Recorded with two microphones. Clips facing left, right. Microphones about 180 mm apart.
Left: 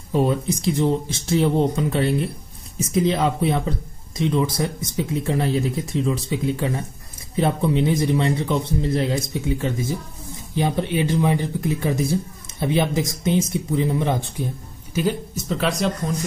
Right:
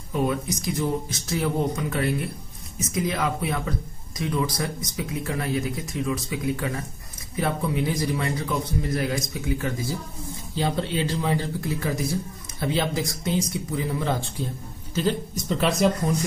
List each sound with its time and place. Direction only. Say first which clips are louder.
0.1 s a man's voice: left 5 dB; 30° left (ahead or behind); by 15.4 s 10° left (ahead or behind)
15.4 s speech: right 1 dB; centre (ahead or behind)